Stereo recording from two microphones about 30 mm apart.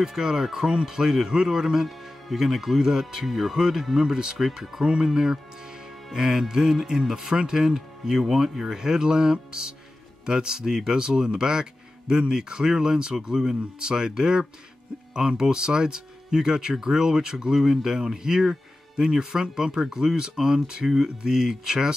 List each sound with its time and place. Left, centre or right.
0.0 s speech: centre
1.9 s speech: centre
3.3 s speech: centre
3.5 s speech: centre
5.0 s speech: centre
20.8 s speech: centre
21.2 s speech: right